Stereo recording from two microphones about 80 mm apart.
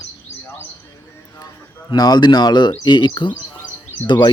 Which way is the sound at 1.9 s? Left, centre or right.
Left.